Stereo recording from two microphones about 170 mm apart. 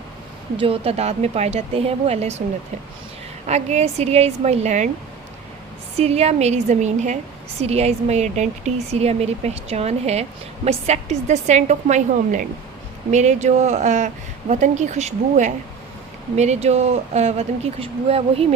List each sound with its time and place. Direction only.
0.5 s speech: 35° right (ahead or behind)
3.4 s speech: 40° right (ahead or behind)
6.0 s a woman's voice: 40° right (ahead or behind)